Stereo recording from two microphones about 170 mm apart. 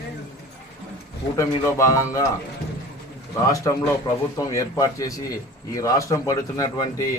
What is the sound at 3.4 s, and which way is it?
A man's voice, 20° left (ahead or behind).